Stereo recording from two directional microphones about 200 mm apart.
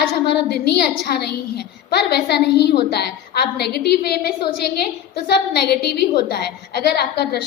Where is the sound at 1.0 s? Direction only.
55° left (ahead or behind).